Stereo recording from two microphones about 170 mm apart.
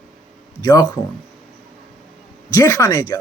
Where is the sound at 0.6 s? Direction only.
20° left (ahead or behind).